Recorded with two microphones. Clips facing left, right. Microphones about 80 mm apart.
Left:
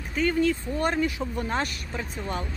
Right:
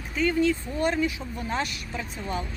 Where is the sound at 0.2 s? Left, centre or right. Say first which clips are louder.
Even; left.